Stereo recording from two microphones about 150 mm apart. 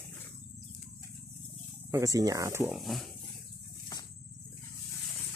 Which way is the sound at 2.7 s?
Centre (ahead or behind).